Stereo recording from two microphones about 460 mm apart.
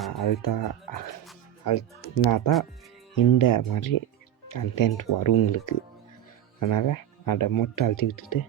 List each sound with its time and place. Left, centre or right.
0.1 s music: left
0.4 s speech: left